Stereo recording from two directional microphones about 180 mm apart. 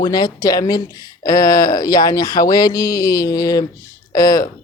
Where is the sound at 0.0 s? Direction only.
20° left (ahead or behind).